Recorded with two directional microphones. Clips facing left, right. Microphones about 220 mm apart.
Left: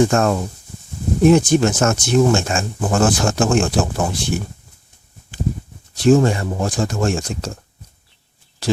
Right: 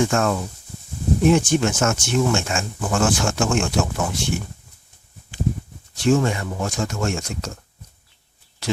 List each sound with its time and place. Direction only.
0.0 s speech: 40° left (ahead or behind)
5.9 s speech: 35° left (ahead or behind)